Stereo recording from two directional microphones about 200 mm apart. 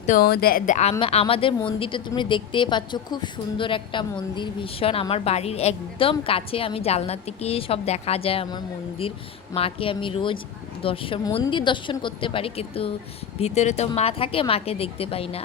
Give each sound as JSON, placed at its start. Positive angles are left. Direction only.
{"t": 0.0, "sound": "speech", "side_deg": 45}